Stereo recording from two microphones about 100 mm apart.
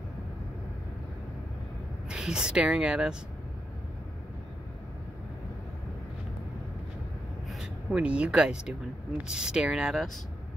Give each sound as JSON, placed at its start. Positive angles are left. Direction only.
{"t": 2.0, "sound": "speech", "side_deg": -10}
{"t": 7.4, "sound": "speech", "side_deg": -10}